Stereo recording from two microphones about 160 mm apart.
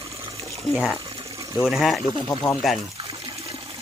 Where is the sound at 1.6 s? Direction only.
Centre (ahead or behind).